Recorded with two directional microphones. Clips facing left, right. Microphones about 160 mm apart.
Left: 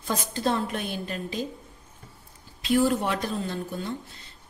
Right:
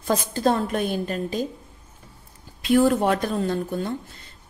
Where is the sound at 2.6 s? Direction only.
55° right (ahead or behind).